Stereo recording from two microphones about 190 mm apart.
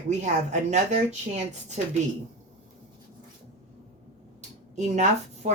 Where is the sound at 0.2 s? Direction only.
40° right (ahead or behind).